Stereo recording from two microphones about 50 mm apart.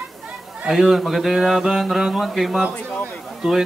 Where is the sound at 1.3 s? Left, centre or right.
Centre.